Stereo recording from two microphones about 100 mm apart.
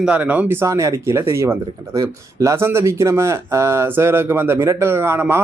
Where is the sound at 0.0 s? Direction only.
15° right (ahead or behind).